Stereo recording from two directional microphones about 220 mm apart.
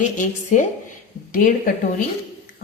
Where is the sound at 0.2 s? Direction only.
35° left (ahead or behind).